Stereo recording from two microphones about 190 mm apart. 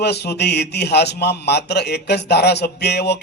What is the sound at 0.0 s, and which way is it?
A man's voice, 60° left (ahead or behind).